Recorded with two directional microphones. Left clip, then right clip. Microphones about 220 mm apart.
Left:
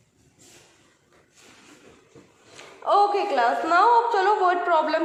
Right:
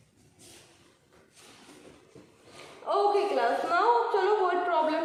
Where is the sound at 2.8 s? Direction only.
45° left (ahead or behind).